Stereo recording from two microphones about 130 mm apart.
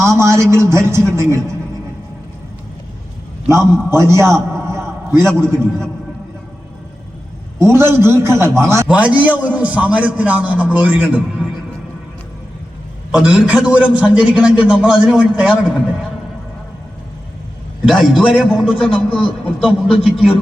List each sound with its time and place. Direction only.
0.0 s a man's voice: 20° right (ahead or behind)
3.5 s a man's voice: 20° right (ahead or behind)
7.6 s a man's voice: 20° right (ahead or behind)
13.1 s a man's voice: 5° right (ahead or behind)
17.8 s a man's voice: 5° right (ahead or behind)